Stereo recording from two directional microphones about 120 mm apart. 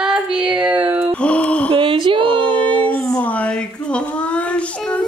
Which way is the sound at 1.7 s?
45° right (ahead or behind).